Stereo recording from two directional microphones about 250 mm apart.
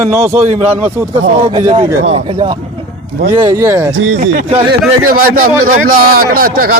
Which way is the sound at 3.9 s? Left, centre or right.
Right.